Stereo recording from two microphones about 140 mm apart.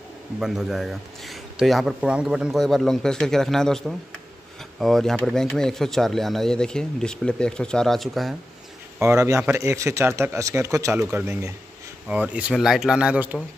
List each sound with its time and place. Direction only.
0.4 s speech: 5° right (ahead or behind)
9.0 s a man's voice: 20° right (ahead or behind)